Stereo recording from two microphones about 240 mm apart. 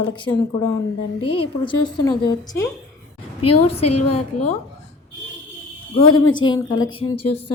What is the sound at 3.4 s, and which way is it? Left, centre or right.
A woman's voice, left.